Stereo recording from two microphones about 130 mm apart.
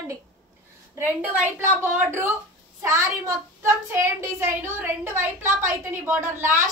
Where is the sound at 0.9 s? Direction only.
10° right (ahead or behind).